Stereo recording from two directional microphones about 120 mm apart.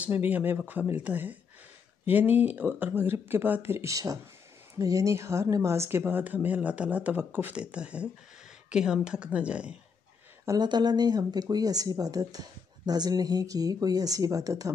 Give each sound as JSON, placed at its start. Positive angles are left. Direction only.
{"t": 0.0, "sound": "speech", "side_deg": -15}
{"t": 10.4, "sound": "speech", "side_deg": -30}